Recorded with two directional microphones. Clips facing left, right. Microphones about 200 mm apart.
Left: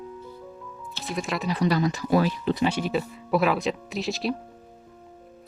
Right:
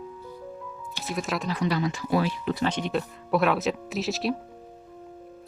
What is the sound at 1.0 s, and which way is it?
Speech, centre (ahead or behind).